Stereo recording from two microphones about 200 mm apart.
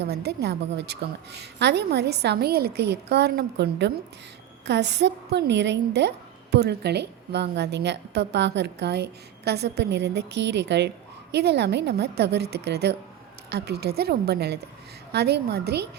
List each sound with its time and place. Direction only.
0.0 s a woman's voice: 55° right (ahead or behind)